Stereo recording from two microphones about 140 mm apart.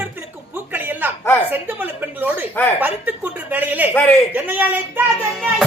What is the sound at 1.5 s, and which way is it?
Speech, 15° right (ahead or behind).